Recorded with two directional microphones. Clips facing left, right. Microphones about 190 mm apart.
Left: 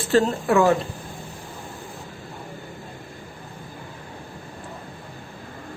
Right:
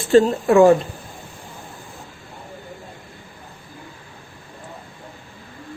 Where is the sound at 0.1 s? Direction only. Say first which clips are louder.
Right 5 dB; 20° right (ahead or behind).